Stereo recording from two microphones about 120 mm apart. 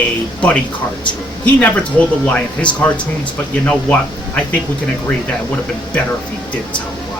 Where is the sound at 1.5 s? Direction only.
10° left (ahead or behind).